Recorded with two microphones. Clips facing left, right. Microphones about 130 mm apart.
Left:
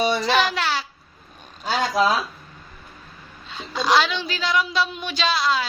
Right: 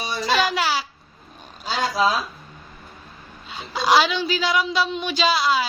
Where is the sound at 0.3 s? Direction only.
5° right (ahead or behind).